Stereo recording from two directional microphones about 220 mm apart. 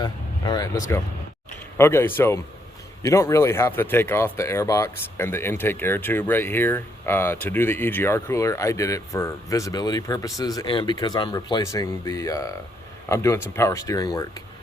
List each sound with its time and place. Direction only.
0.0 s speech: 20° left (ahead or behind)